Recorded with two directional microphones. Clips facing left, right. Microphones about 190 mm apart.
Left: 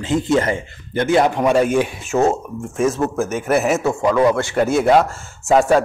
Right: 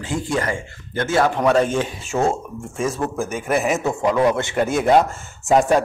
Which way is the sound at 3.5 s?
5° left (ahead or behind).